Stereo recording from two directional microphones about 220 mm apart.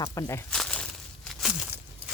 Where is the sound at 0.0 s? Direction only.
15° left (ahead or behind).